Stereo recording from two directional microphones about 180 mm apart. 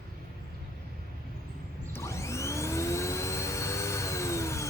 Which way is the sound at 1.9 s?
15° left (ahead or behind).